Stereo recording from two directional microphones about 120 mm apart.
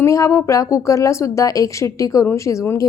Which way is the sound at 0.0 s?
25° left (ahead or behind).